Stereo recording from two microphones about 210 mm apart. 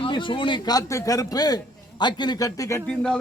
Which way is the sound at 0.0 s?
25° left (ahead or behind).